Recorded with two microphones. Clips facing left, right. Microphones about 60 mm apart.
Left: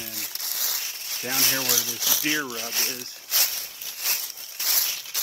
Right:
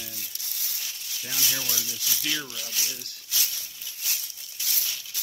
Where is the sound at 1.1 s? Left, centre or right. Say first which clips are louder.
Left 5 dB; left.